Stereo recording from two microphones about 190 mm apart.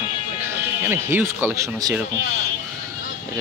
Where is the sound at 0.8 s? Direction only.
15° right (ahead or behind).